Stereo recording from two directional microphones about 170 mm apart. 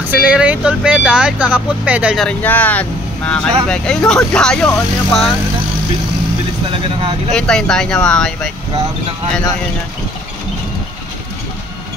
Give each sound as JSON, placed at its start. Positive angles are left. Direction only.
{"t": 0.1, "sound": "speech", "side_deg": -10}
{"t": 2.2, "sound": "speech", "side_deg": 10}
{"t": 6.7, "sound": "speech", "side_deg": -30}
{"t": 7.3, "sound": "speech", "side_deg": 5}